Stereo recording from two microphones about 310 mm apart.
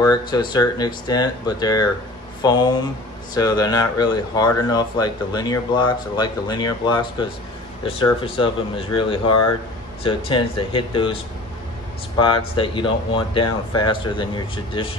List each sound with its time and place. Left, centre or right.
0.0 s speech: centre
12.2 s speech: centre